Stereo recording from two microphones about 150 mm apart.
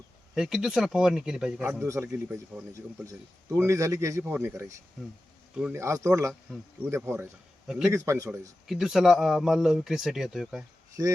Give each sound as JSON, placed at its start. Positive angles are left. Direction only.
{"t": 0.3, "sound": "speech", "side_deg": -5}
{"t": 1.8, "sound": "a man's voice", "side_deg": -15}
{"t": 5.7, "sound": "a man's voice", "side_deg": -20}
{"t": 8.6, "sound": "speech", "side_deg": -5}